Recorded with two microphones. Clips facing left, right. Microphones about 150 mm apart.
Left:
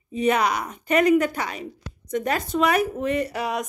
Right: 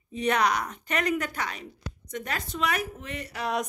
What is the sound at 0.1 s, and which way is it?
A woman's voice, 5° left (ahead or behind).